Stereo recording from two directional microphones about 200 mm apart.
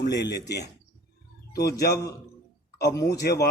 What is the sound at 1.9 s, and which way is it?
Speech, 15° left (ahead or behind).